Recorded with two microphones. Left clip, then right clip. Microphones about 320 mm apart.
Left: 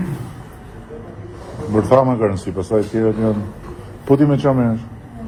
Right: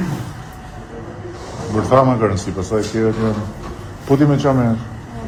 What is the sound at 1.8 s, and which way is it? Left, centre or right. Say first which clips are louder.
Speech: right 1 dB; left.